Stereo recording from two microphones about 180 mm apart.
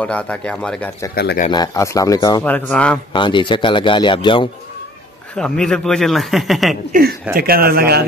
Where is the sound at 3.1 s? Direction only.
25° left (ahead or behind).